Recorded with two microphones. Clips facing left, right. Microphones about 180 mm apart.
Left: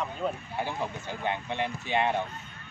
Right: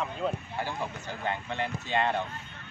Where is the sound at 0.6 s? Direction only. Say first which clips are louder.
Left 2 dB; 15° left (ahead or behind).